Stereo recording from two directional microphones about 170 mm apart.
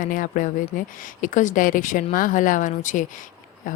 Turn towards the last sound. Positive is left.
turn(degrees=50)  # may be behind; listen again after turning